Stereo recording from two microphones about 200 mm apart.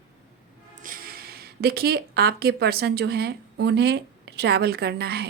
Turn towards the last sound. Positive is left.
turn(degrees=-55)  # may be behind; listen again after turning